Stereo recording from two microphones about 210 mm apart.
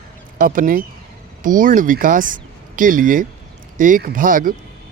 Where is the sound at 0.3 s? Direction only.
40° right (ahead or behind).